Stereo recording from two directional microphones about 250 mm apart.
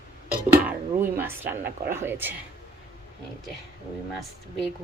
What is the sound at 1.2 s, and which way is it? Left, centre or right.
Speech, centre.